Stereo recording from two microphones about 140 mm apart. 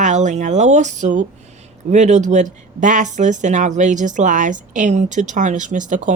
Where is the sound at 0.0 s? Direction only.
60° right (ahead or behind).